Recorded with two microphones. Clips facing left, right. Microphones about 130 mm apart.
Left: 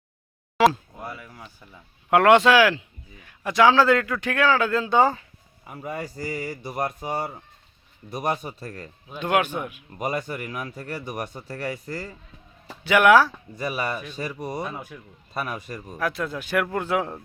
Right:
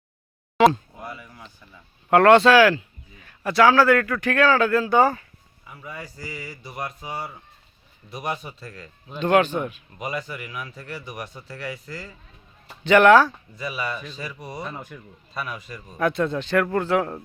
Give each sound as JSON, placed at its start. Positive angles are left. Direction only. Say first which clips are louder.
{"t": 0.5, "sound": "a sound", "louder": "right 2 dB", "side_deg": 0}
{"t": 2.0, "sound": "speech", "louder": "right 2 dB", "side_deg": 10}
{"t": 5.6, "sound": "speech", "louder": "left 6 dB", "side_deg": 45}
{"t": 6.0, "sound": "speech", "louder": "left 5 dB", "side_deg": 55}
{"t": 9.0, "sound": "a man's voice", "louder": "right 4 dB", "side_deg": 10}
{"t": 10.0, "sound": "speech", "louder": "left 3 dB", "side_deg": 45}
{"t": 12.8, "sound": "a man's voice", "louder": "right 2 dB", "side_deg": 10}
{"t": 13.6, "sound": "speech", "louder": "left 2 dB", "side_deg": 45}
{"t": 14.6, "sound": "a man's voice", "louder": "left 2 dB", "side_deg": 10}
{"t": 15.3, "sound": "speech", "louder": "left 2 dB", "side_deg": 45}
{"t": 16.0, "sound": "a man's voice", "louder": "right 5 dB", "side_deg": 5}